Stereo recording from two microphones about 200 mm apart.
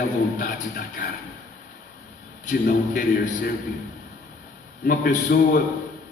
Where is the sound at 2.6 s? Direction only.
40° left (ahead or behind).